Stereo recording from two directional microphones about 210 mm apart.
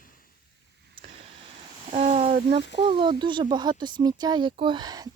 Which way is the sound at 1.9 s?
35° right (ahead or behind).